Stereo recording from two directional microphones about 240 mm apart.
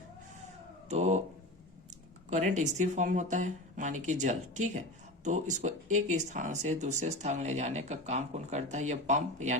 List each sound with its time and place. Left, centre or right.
0.9 s speech: right
2.3 s speech: right